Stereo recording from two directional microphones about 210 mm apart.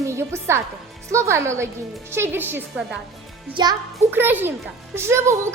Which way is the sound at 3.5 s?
20° right (ahead or behind).